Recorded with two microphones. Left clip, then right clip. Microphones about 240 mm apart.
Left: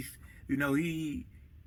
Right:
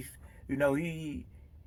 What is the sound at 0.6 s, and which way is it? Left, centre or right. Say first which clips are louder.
Speech: right 2 dB; right.